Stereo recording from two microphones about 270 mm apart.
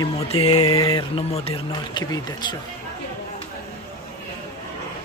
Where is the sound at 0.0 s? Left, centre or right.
Left.